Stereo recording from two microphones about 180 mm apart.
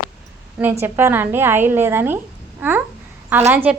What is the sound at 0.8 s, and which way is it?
A woman's voice, 10° right (ahead or behind).